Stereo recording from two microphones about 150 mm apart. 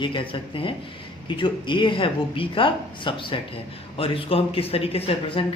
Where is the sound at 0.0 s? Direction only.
35° left (ahead or behind).